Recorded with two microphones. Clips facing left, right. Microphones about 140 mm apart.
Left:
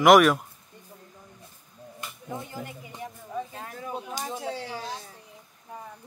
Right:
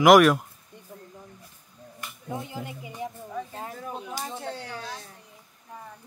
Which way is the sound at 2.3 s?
15° right (ahead or behind).